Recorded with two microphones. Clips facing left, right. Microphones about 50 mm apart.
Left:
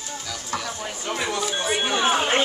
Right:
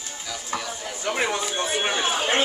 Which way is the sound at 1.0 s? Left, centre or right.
Right.